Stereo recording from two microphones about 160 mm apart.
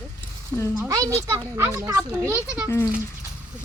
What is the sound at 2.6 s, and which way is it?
Speech, 20° left (ahead or behind).